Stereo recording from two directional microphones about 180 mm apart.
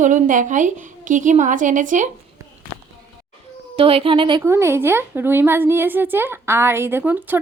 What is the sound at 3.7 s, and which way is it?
Speech, 30° right (ahead or behind).